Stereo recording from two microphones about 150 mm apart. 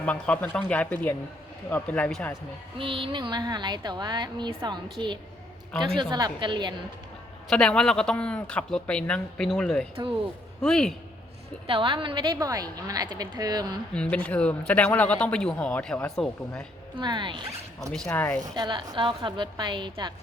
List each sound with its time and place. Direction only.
0.0 s speech: 10° left (ahead or behind)
2.7 s speech: 35° right (ahead or behind)
7.5 s speech: 5° left (ahead or behind)
11.6 s speech: 35° right (ahead or behind)
13.9 s speech: 5° left (ahead or behind)
16.9 s a woman's voice: 30° right (ahead or behind)
17.7 s speech: 5° left (ahead or behind)
18.5 s a woman's voice: 30° right (ahead or behind)